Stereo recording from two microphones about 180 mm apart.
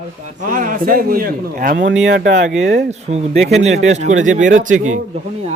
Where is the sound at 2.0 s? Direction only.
70° right (ahead or behind).